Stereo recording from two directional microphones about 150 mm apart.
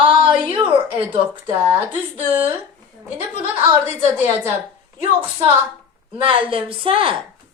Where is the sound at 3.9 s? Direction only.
15° right (ahead or behind).